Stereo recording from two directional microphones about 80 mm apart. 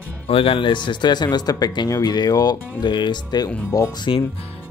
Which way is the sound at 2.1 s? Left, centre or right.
Left.